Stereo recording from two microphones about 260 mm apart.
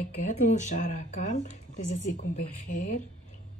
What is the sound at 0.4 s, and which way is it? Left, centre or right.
Speech, left.